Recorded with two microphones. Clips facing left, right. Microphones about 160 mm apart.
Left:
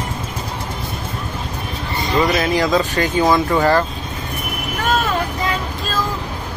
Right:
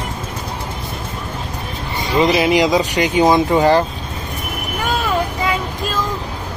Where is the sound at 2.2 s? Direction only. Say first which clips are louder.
Right 3 dB; 15° right (ahead or behind).